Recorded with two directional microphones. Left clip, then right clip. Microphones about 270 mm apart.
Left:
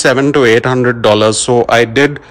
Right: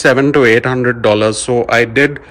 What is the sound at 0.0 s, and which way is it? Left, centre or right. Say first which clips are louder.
Speech: even; centre.